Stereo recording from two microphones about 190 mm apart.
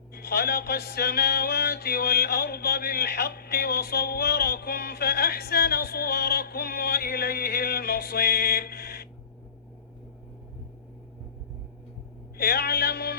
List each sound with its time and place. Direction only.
0.1 s music: 55° left (ahead or behind)
12.4 s music: 55° left (ahead or behind)